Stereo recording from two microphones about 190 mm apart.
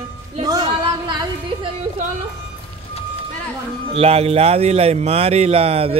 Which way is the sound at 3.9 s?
30° right (ahead or behind).